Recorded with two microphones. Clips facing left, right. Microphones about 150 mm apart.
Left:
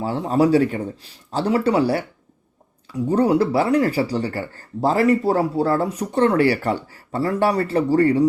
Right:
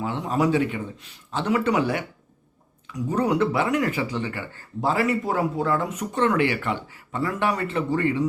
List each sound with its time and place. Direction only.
0.0 s speech: 35° left (ahead or behind)